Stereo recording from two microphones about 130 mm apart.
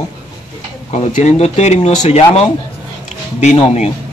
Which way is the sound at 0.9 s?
60° left (ahead or behind).